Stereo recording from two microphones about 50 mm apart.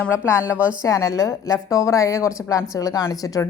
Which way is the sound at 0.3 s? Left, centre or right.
Right.